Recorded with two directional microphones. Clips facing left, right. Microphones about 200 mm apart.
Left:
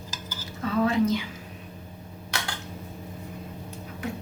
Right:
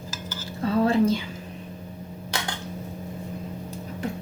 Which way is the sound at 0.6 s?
30° right (ahead or behind).